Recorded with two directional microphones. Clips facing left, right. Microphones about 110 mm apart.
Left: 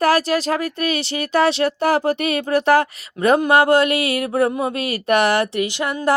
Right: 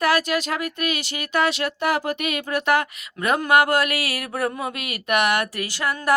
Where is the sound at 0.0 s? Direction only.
35° left (ahead or behind).